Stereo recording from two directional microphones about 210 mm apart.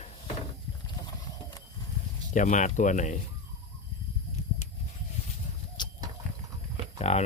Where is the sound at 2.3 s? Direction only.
35° left (ahead or behind).